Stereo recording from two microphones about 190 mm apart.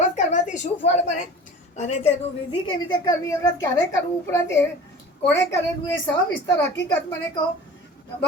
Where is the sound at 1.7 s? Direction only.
35° left (ahead or behind); by 5.9 s 15° left (ahead or behind).